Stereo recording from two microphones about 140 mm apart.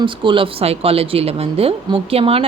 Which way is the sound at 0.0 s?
35° right (ahead or behind).